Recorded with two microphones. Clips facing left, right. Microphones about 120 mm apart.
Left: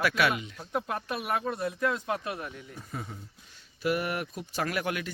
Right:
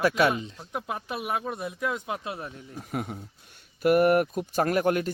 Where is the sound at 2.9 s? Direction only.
70° right (ahead or behind).